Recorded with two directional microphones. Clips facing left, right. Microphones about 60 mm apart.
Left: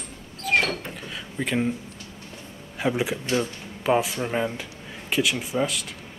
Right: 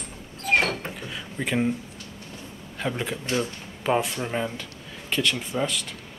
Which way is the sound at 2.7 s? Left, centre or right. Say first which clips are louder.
Left 4 dB; centre.